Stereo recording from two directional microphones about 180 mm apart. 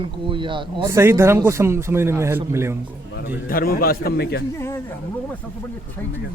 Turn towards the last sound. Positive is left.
turn(degrees=65)  # may be behind; listen again after turning